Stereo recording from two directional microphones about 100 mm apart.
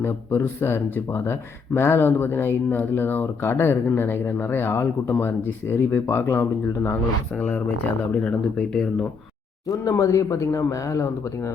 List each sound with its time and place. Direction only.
0.0 s speech: 25° left (ahead or behind); by 9.0 s 5° left (ahead or behind)
9.6 s speech: 35° left (ahead or behind)